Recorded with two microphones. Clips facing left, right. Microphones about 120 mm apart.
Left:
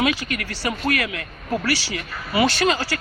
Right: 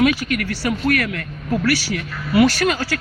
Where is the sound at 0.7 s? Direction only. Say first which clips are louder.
Right 3 dB; 5° left (ahead or behind).